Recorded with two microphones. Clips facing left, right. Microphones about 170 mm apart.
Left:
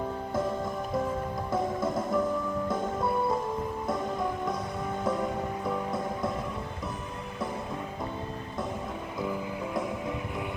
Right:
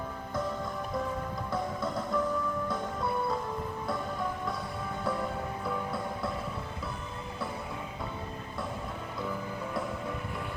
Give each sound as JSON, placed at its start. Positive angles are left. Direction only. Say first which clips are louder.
{"t": 1.5, "sound": "music", "louder": "left 5 dB", "side_deg": 20}